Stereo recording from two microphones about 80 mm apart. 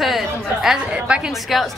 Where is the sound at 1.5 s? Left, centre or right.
Centre.